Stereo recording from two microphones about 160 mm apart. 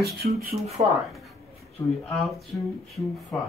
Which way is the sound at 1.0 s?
Centre (ahead or behind).